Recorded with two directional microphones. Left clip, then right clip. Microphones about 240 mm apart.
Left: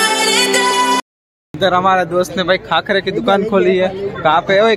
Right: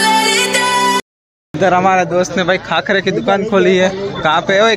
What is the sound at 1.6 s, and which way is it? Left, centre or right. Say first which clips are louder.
Speech: right 1 dB; centre.